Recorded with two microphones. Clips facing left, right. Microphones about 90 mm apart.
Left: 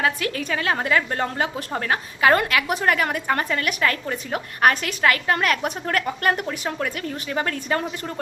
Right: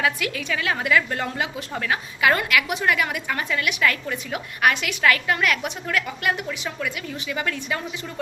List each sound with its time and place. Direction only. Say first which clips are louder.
0.0 s a woman's voice: left 1 dB; 40° left (ahead or behind)